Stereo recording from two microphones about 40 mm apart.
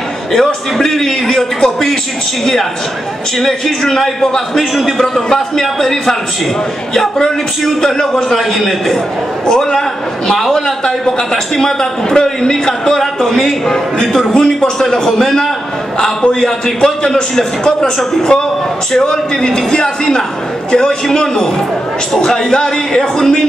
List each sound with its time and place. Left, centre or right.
0.3 s a man's voice: centre
3.3 s a man's voice: centre
9.5 s a man's voice: centre
16.0 s a man's voice: left
16.3 s a man's voice: centre